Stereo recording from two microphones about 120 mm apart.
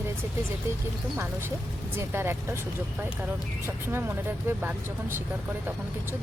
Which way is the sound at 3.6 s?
20° right (ahead or behind).